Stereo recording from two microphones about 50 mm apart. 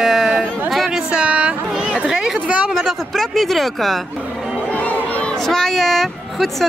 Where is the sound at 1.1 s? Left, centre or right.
Right.